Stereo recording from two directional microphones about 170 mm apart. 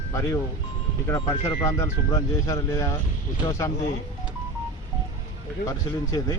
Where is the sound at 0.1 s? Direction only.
15° left (ahead or behind).